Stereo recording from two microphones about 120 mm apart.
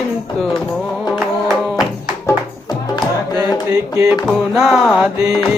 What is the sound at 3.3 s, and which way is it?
Music, 35° right (ahead or behind).